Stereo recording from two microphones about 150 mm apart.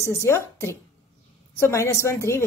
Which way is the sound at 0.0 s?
20° left (ahead or behind).